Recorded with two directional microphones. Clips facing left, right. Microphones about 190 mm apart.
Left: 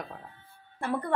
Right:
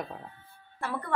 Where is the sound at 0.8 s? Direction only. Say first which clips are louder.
Left 4 dB; 20° left (ahead or behind).